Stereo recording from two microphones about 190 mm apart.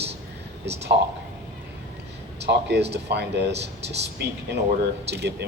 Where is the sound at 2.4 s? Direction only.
60° right (ahead or behind).